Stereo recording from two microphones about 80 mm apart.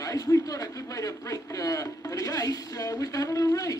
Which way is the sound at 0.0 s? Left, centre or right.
Left.